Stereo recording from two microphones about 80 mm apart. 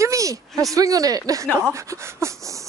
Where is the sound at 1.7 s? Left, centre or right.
Right.